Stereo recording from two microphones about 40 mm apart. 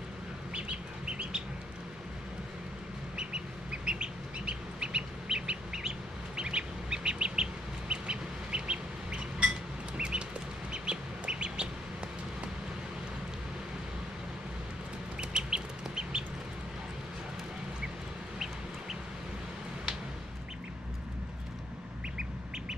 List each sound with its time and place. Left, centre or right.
3.2 s bird: right
7.9 s duck: right
9.9 s bird: right
15.1 s chicken: right